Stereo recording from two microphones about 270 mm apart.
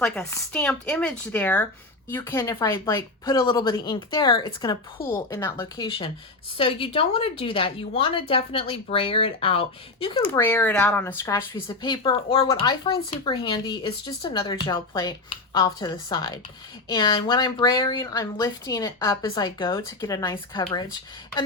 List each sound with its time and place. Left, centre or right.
0.0 s a woman's voice: centre
10.2 s speech: centre